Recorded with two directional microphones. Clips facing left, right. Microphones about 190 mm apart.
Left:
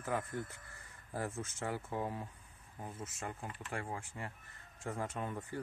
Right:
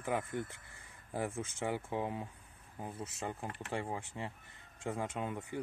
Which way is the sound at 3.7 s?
20° right (ahead or behind).